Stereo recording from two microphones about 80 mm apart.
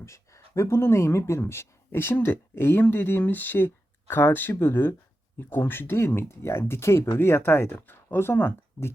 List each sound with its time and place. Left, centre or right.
0.0 s speech: left